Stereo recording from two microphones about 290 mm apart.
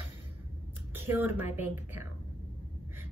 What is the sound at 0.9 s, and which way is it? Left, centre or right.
A woman's voice, centre.